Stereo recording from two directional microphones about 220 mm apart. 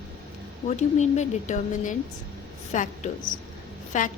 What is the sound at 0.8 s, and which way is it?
A woman's voice, 30° left (ahead or behind).